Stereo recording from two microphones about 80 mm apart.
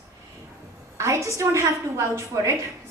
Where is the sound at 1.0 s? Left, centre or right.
Right.